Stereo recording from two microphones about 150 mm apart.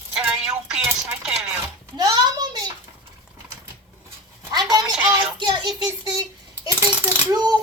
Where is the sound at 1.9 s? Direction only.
25° right (ahead or behind).